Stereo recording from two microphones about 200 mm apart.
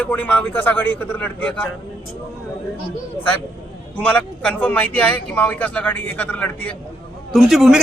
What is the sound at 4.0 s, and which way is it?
A man's voice, 5° left (ahead or behind).